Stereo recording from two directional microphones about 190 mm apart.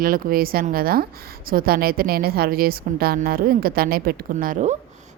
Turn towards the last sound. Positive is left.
turn(degrees=-45)  # may be behind; listen again after turning